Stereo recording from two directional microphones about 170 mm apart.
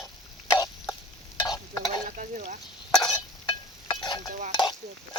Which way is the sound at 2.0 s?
50° right (ahead or behind).